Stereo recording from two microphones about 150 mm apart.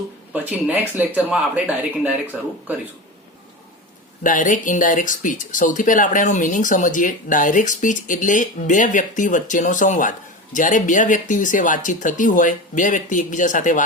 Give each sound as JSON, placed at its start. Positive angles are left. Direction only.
{"t": 0.3, "sound": "speech", "side_deg": -10}
{"t": 4.2, "sound": "speech", "side_deg": 60}